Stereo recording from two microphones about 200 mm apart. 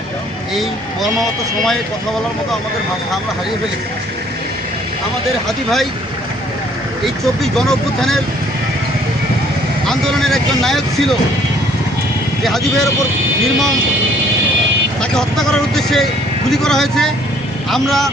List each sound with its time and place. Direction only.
0.5 s speech: centre (ahead or behind)
5.5 s speech: centre (ahead or behind)
7.0 s speech: centre (ahead or behind)
9.8 s speech: centre (ahead or behind)
12.4 s speech: centre (ahead or behind)
15.1 s speech: 5° left (ahead or behind)